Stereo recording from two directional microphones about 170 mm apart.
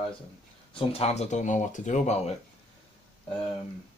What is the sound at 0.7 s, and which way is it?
Speech, 35° left (ahead or behind).